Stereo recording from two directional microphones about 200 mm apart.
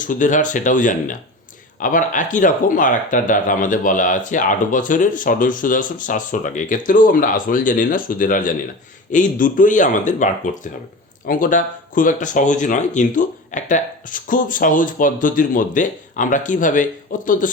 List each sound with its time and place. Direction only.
0.0 s speech: 40° left (ahead or behind)